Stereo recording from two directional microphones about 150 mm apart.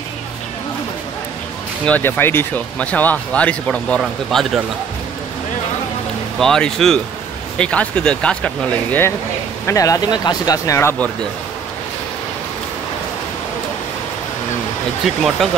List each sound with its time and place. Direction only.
1.9 s speech: 15° left (ahead or behind)
6.4 s speech: 5° left (ahead or behind)
9.7 s speech: 20° left (ahead or behind)
15.0 s speech: centre (ahead or behind)